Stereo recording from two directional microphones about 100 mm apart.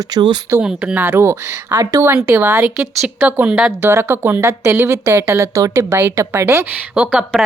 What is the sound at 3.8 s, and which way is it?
Speech, 25° right (ahead or behind).